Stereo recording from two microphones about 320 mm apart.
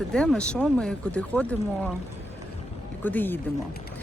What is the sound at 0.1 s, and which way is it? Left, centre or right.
Speech, centre.